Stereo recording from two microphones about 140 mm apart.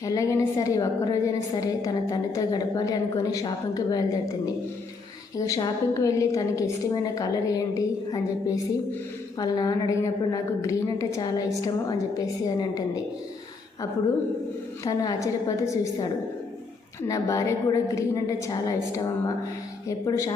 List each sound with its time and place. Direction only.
0.0 s a woman's voice: 25° left (ahead or behind)
14.8 s a woman's voice: 25° left (ahead or behind)
17.1 s a woman's voice: 25° left (ahead or behind)